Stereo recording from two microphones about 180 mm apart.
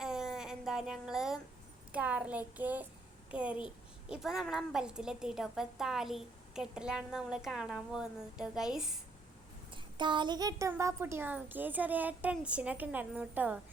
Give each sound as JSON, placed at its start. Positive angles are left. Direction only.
{"t": 0.0, "sound": "a sound", "side_deg": -5}
{"t": 1.9, "sound": "a woman's voice", "side_deg": -5}
{"t": 9.7, "sound": "a woman's voice", "side_deg": -25}